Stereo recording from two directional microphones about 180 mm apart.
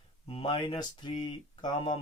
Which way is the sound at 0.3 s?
30° left (ahead or behind).